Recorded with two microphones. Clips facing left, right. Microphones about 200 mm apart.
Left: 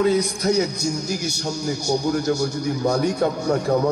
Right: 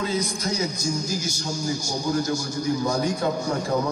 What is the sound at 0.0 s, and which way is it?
A man's voice, 65° left (ahead or behind).